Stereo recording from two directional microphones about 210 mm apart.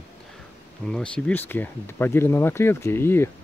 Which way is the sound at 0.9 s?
5° left (ahead or behind).